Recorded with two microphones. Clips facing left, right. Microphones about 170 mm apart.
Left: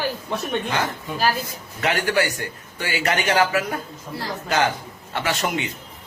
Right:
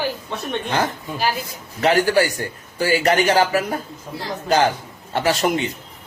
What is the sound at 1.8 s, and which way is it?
A man's voice, 35° right (ahead or behind).